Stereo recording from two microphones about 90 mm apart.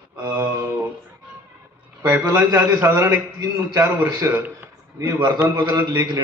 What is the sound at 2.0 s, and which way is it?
A man's voice, 35° right (ahead or behind).